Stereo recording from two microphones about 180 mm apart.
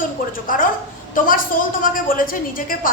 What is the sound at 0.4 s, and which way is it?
A woman's voice, 50° left (ahead or behind).